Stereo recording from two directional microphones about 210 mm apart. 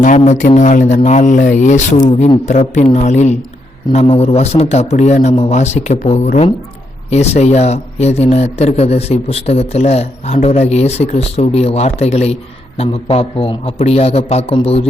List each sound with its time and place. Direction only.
0.0 s a man's voice: 35° left (ahead or behind)